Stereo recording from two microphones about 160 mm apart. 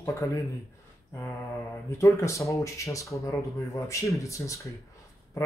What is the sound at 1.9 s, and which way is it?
Speech, 20° left (ahead or behind).